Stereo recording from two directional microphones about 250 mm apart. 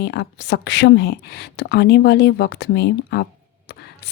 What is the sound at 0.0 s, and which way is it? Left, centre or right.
Speech, left.